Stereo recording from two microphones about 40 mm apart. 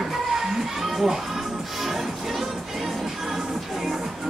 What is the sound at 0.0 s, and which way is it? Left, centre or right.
Music, centre.